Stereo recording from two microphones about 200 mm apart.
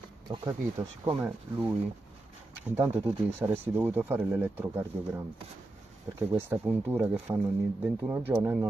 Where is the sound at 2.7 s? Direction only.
10° right (ahead or behind).